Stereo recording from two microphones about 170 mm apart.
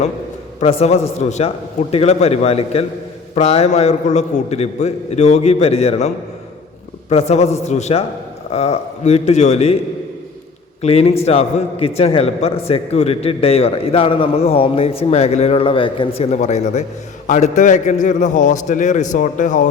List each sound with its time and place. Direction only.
0.6 s a man's voice: 35° left (ahead or behind)
7.1 s a man's voice: 40° left (ahead or behind)
10.8 s a man's voice: 35° left (ahead or behind)